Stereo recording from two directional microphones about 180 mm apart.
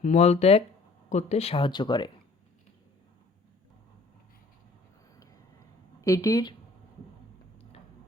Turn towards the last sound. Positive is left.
turn(degrees=20)  # may be behind; listen again after turning